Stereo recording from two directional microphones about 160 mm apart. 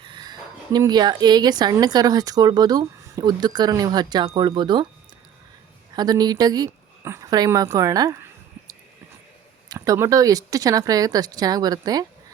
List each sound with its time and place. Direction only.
0.0 s speech: 25° right (ahead or behind)
6.0 s speech: 25° right (ahead or behind)
9.6 s speech: 20° right (ahead or behind)